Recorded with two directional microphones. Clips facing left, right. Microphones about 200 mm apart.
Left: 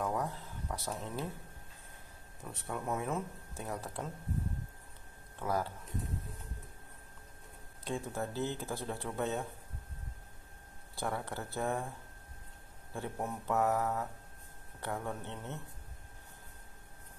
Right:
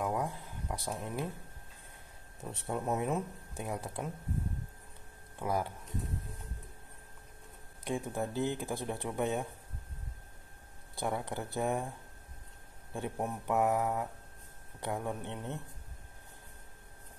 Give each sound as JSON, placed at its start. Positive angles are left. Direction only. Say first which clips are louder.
{"t": 0.0, "sound": "a sound", "louder": "right 1 dB", "side_deg": -10}
{"t": 2.4, "sound": "speech", "louder": "right 4 dB", "side_deg": -25}
{"t": 5.4, "sound": "speech", "louder": "right 1 dB", "side_deg": -15}
{"t": 7.8, "sound": "speech", "louder": "right 2 dB", "side_deg": -15}
{"t": 11.0, "sound": "speech", "louder": "right 2 dB", "side_deg": -15}
{"t": 12.9, "sound": "speech", "louder": "right 2 dB", "side_deg": -15}